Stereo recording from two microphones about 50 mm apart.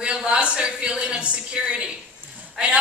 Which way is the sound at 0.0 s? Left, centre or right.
Centre.